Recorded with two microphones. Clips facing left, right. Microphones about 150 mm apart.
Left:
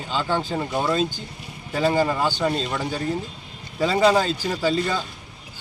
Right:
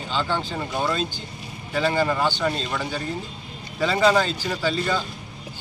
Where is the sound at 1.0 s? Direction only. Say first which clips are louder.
Left 4 dB; 45° left (ahead or behind).